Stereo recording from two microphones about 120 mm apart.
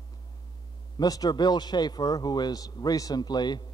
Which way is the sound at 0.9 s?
30° left (ahead or behind).